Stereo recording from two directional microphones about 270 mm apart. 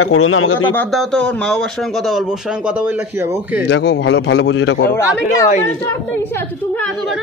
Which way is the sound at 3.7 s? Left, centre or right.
Left.